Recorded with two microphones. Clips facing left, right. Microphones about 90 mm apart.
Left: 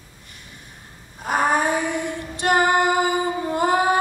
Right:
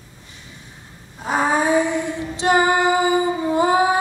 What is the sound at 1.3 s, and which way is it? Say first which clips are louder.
Female singing: right 2 dB; 60° left (ahead or behind).